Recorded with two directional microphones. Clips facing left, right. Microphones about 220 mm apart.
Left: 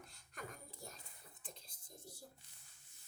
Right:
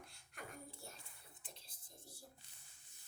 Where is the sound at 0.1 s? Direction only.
40° left (ahead or behind).